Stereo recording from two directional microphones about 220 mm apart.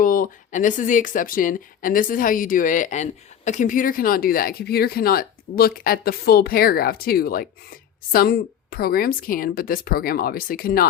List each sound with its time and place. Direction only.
0.0 s speech: 40° left (ahead or behind)